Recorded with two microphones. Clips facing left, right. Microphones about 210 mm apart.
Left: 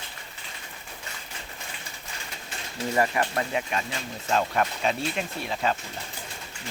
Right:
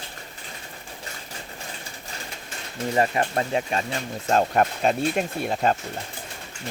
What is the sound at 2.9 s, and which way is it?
Speech, 30° right (ahead or behind).